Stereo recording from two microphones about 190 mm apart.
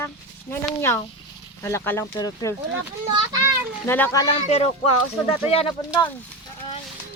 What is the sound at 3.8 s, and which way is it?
Speech, 10° left (ahead or behind).